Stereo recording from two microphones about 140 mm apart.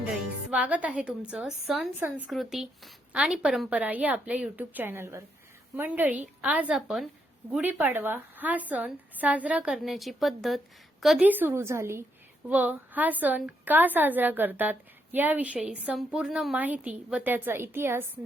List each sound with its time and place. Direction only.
0.5 s a woman's voice: 10° right (ahead or behind)
7.5 s a woman's voice: 10° right (ahead or behind)
11.2 s a woman's voice: 15° right (ahead or behind)